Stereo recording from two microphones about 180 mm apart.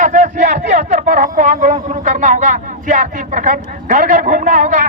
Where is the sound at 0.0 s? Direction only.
45° right (ahead or behind).